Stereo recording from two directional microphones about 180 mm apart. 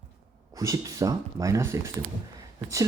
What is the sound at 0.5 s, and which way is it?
Speech, 20° right (ahead or behind).